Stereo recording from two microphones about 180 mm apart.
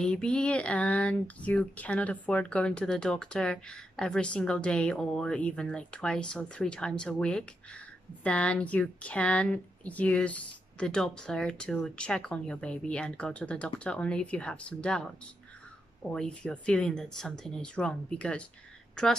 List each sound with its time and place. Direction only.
0.0 s speech: 5° left (ahead or behind)